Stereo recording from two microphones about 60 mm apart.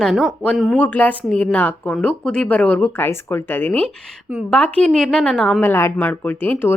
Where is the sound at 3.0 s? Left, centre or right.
Left.